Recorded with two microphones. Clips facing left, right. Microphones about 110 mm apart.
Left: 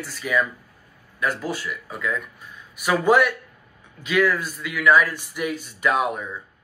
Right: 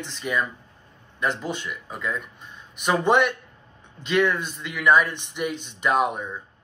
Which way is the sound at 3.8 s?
5° left (ahead or behind).